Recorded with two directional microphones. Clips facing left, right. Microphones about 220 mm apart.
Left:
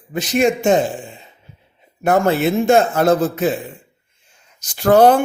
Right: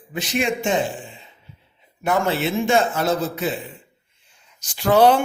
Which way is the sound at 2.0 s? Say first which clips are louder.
Left 6 dB; 45° left (ahead or behind).